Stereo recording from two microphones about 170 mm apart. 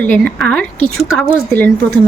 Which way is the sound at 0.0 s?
10° left (ahead or behind).